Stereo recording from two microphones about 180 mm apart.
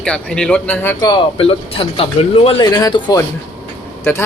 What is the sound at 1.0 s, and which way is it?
A man's voice, 30° left (ahead or behind).